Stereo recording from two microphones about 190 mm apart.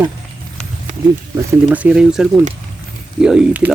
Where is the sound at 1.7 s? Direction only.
5° right (ahead or behind).